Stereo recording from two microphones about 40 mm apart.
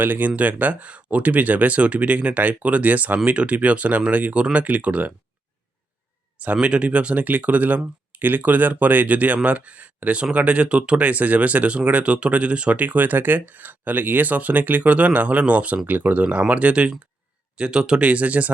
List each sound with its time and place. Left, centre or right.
0.0 s speech: right
6.4 s speech: right
12.8 s speech: right
16.5 s speech: right
17.6 s speech: right
18.1 s speech: right